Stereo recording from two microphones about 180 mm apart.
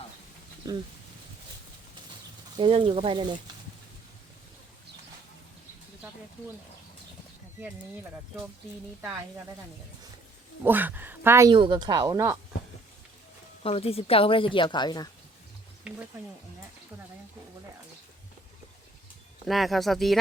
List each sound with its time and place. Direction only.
2.6 s speech: 30° right (ahead or behind)
10.6 s speech: 10° right (ahead or behind)
11.5 s speech: 25° right (ahead or behind)
13.6 s speech: 35° left (ahead or behind)
19.5 s speech: centre (ahead or behind)